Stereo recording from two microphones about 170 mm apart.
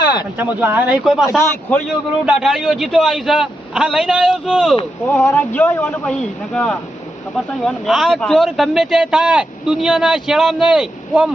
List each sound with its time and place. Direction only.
0.0 s a sound: 25° left (ahead or behind)
0.3 s speech: 10° right (ahead or behind)
1.4 s a man's voice: 15° left (ahead or behind)
2.2 s speech: 5° right (ahead or behind)
5.0 s a man's voice: 10° left (ahead or behind); by 11.3 s 5° right (ahead or behind)